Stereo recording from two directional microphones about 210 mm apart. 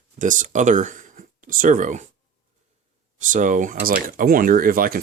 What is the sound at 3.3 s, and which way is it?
Speech, 40° right (ahead or behind).